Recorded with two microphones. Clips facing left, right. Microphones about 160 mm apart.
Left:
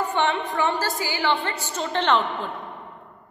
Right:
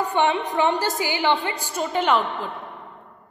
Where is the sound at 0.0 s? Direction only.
15° right (ahead or behind).